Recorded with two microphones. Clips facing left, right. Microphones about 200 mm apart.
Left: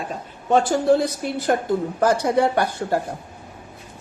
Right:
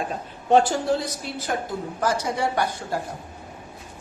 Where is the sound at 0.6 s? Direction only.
55° left (ahead or behind).